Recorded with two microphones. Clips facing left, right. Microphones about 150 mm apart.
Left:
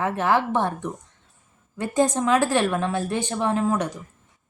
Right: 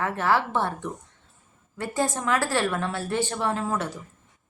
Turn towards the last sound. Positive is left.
turn(degrees=15)  # may be behind; listen again after turning